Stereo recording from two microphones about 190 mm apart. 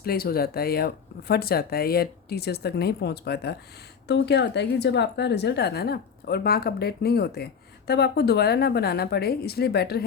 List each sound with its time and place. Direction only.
0.0 s a woman's voice: 55° left (ahead or behind)